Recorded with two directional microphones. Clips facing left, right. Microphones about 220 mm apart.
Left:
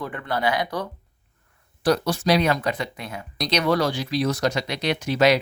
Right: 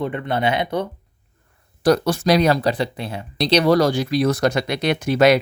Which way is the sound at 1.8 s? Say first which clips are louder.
Right 4 dB; 50° right (ahead or behind).